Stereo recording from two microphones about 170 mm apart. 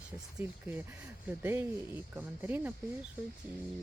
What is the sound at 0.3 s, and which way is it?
Speech, 10° right (ahead or behind).